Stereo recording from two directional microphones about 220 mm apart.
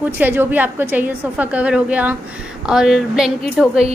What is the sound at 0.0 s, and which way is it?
A woman's voice, 10° right (ahead or behind).